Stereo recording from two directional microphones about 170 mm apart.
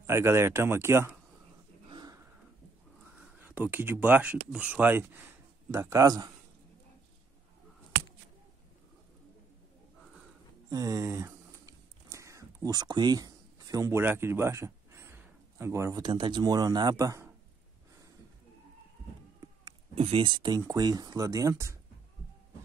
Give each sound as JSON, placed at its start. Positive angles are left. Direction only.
{"t": 0.0, "sound": "speech", "side_deg": -15}
{"t": 1.9, "sound": "dog", "side_deg": -25}
{"t": 3.2, "sound": "speech", "side_deg": -10}
{"t": 10.7, "sound": "a sound", "side_deg": -20}
{"t": 19.6, "sound": "speech", "side_deg": -30}